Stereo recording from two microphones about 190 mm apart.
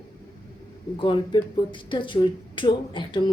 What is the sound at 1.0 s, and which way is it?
Speech, 25° left (ahead or behind).